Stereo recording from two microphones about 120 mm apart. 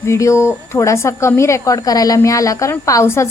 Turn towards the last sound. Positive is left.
turn(degrees=25)  # may be behind; listen again after turning